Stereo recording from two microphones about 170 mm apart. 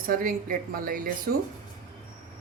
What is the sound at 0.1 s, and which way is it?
A woman's voice, 55° right (ahead or behind).